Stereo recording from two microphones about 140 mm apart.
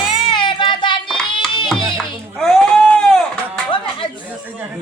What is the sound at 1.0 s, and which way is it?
Hands, 5° left (ahead or behind).